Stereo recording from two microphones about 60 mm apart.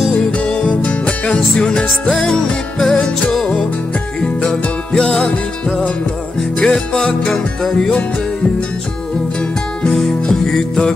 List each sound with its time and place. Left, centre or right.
0.1 s music: centre
4.2 s music: centre
9.9 s music: centre